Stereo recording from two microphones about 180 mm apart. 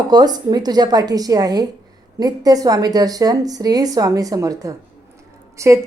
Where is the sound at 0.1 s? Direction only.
20° right (ahead or behind).